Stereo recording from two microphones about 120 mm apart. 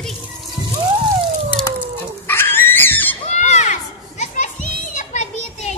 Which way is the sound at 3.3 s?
80° left.